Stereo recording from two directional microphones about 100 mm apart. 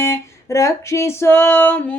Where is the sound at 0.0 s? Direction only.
30° left (ahead or behind).